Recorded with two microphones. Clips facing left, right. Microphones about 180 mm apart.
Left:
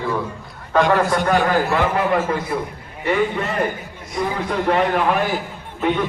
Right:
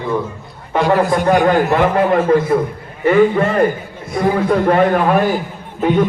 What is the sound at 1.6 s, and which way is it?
A man's voice, 45° right (ahead or behind).